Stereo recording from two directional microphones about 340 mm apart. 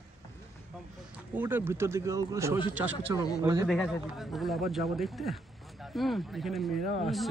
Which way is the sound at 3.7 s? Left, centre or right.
Centre.